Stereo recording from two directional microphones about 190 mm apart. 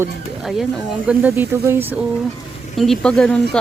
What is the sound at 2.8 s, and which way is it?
Speech, centre (ahead or behind).